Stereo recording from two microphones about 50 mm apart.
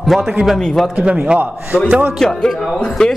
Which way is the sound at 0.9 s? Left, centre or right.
Right.